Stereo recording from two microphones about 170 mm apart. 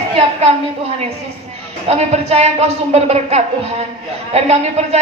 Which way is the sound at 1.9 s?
40° right (ahead or behind).